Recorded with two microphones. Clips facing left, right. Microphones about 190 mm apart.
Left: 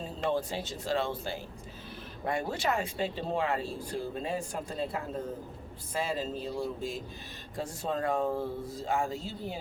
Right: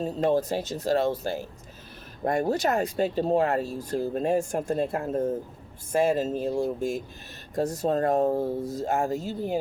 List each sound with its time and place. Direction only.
0.0 s speech: 40° right (ahead or behind)